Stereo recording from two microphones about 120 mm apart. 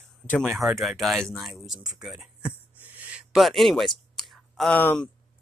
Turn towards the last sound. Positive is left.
turn(degrees=15)  # may be behind; listen again after turning